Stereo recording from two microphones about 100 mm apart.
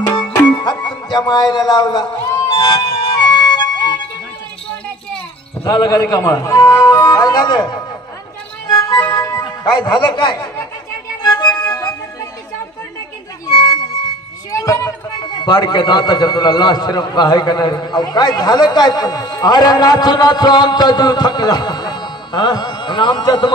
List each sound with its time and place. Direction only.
0.5 s music: 50° left (ahead or behind)
5.7 s a man's voice: 40° left (ahead or behind)
6.6 s a man's voice: 45° left (ahead or behind)
9.1 s music: 40° left (ahead or behind)
9.9 s a man's voice: 50° left (ahead or behind)
11.2 s music: 45° left (ahead or behind)
13.5 s music: 50° left (ahead or behind)
14.5 s a sound: 30° left (ahead or behind)
15.2 s a man's voice: 45° left (ahead or behind)